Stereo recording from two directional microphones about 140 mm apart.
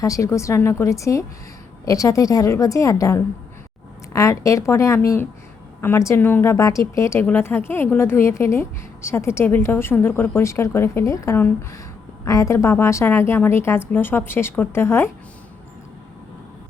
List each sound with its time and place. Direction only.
0.0 s a woman's voice: 20° left (ahead or behind)